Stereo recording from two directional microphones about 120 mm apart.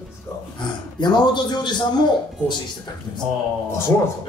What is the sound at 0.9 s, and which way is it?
Speech, 40° left (ahead or behind).